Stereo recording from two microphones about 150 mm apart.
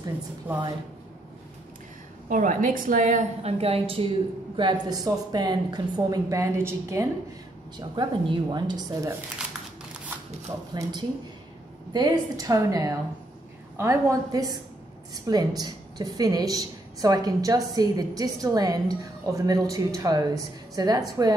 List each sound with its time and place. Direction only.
0.5 s a woman's voice: 10° right (ahead or behind)
2.2 s a woman's voice: 60° right (ahead or behind); by 4.1 s 40° right (ahead or behind)
4.6 s a woman's voice: 30° right (ahead or behind)
7.7 s a woman's voice: 30° right (ahead or behind)
10.7 s a woman's voice: 30° right (ahead or behind)